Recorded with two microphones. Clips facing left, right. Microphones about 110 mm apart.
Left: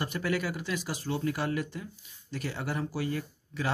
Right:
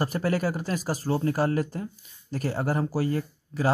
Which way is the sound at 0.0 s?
40° right (ahead or behind).